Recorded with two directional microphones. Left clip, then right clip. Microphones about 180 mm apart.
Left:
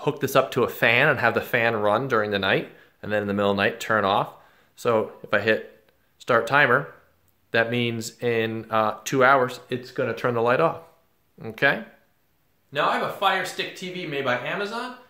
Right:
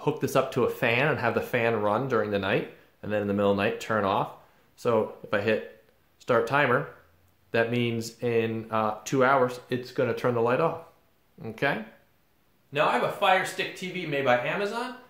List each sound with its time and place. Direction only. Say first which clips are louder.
0.0 s speech: left 4 dB; 20° left (ahead or behind)
9.8 s speech: left 1 dB; 5° left (ahead or behind)